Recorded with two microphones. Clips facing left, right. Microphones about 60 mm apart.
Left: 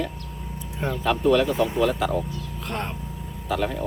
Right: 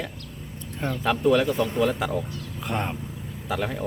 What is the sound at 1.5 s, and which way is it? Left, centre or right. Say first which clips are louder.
Speech: left 2 dB; centre.